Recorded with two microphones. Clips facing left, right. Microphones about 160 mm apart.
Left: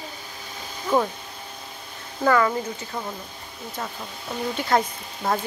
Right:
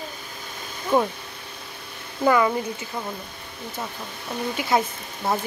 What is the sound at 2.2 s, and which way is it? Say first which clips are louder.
Speech: right 1 dB; 15° right (ahead or behind).